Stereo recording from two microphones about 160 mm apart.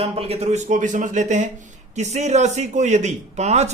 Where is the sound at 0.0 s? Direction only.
40° right (ahead or behind).